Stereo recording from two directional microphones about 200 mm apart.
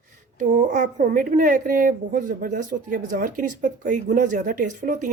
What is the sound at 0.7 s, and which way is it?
A woman's voice, 40° right (ahead or behind).